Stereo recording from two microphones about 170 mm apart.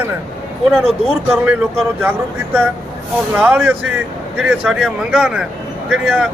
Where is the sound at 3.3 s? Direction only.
10° right (ahead or behind).